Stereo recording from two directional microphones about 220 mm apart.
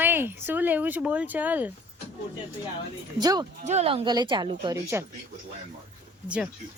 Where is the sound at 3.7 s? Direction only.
30° right (ahead or behind).